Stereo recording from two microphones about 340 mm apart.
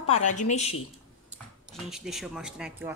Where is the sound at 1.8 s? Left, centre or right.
Centre.